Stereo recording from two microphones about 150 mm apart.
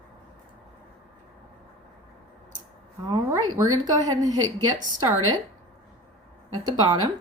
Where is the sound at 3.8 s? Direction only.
25° right (ahead or behind).